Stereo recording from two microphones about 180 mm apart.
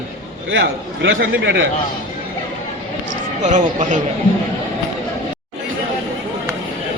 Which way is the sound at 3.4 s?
45° right (ahead or behind).